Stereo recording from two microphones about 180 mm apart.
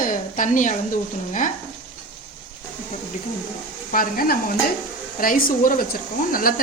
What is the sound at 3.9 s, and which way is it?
Speech, 50° left (ahead or behind).